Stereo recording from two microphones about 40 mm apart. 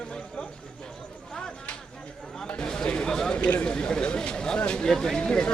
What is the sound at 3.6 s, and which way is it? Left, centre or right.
Speech, centre.